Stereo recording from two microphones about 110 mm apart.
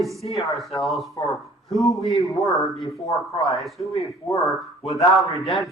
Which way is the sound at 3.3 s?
Centre (ahead or behind).